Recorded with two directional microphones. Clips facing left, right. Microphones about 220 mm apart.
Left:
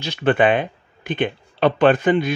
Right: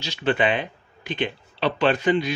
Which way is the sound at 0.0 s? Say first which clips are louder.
Left 5 dB; 55° left (ahead or behind).